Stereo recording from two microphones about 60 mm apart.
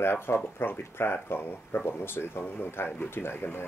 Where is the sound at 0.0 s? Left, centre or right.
Left.